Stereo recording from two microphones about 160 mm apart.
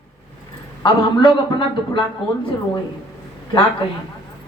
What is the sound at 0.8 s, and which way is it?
A man's voice, 30° left (ahead or behind).